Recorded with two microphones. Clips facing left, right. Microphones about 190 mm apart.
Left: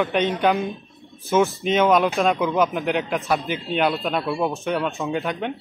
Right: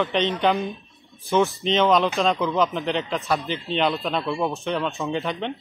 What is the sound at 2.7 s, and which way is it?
Speech, 15° left (ahead or behind).